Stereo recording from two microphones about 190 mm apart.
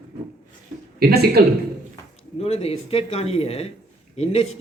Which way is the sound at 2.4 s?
30° left (ahead or behind).